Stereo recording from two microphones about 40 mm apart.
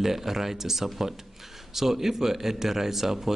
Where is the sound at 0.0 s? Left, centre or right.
Centre.